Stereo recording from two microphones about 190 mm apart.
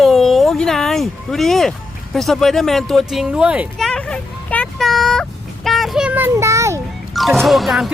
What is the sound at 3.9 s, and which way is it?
Vehicle, 5° left (ahead or behind).